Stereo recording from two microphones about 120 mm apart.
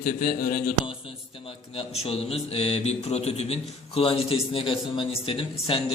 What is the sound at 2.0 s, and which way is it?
A man's voice, 55° left (ahead or behind).